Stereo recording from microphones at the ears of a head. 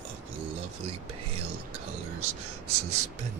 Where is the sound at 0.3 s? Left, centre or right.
Right.